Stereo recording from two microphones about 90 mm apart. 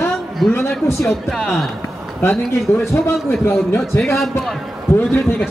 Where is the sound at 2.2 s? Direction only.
25° left (ahead or behind).